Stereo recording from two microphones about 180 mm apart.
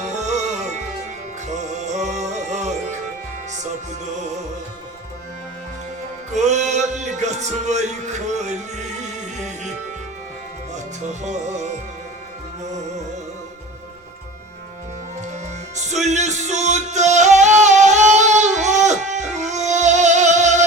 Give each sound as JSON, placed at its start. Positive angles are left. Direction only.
{"t": 0.0, "sound": "music", "side_deg": -40}
{"t": 6.3, "sound": "music", "side_deg": -40}
{"t": 11.0, "sound": "music", "side_deg": -40}
{"t": 15.3, "sound": "music", "side_deg": -40}